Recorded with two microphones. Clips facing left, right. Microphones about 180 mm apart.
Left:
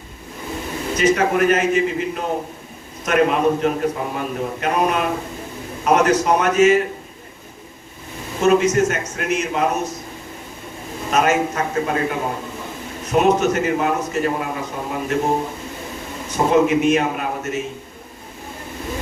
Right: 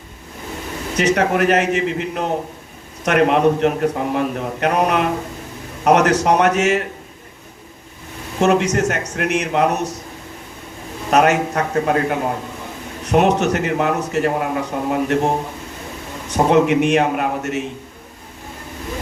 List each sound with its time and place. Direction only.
0.9 s a man's voice: 70° right (ahead or behind)
8.4 s a man's voice: 70° right (ahead or behind)
11.1 s a man's voice: 70° right (ahead or behind)
16.3 s a man's voice: 70° right (ahead or behind)